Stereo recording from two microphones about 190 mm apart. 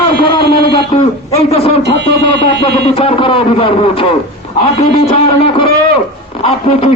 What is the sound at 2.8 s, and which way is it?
A man's voice, 30° left (ahead or behind).